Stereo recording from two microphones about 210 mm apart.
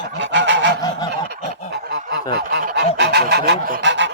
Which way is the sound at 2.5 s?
50° right (ahead or behind).